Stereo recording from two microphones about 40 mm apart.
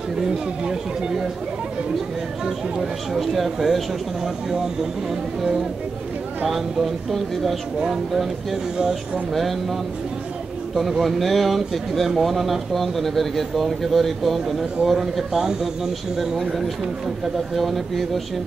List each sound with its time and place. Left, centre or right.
0.2 s speech: centre
3.2 s speech: centre
6.4 s speech: centre
8.7 s speech: centre
9.3 s speech: centre